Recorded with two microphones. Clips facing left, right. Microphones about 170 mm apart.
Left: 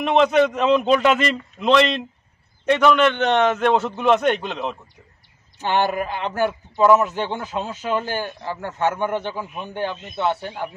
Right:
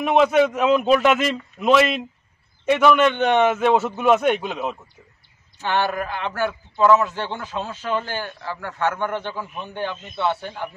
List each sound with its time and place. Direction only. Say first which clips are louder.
0.0 s a man's voice: even; 5° right (ahead or behind)
5.6 s a man's voice: left 2 dB; 15° left (ahead or behind)